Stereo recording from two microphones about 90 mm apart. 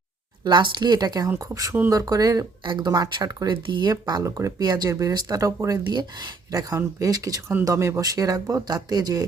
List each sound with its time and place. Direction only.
0.4 s speech: 55° right (ahead or behind)
2.6 s speech: 50° right (ahead or behind)
4.2 s speech: 35° right (ahead or behind)
5.9 s speech: 55° right (ahead or behind)